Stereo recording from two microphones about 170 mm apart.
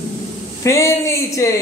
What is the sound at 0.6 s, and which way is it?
Speech, 15° left (ahead or behind).